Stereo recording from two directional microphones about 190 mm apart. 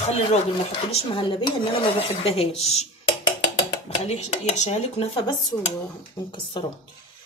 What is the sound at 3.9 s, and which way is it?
Speech, 35° left (ahead or behind).